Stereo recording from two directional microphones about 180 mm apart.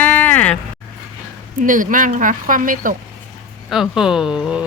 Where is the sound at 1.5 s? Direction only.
45° right (ahead or behind).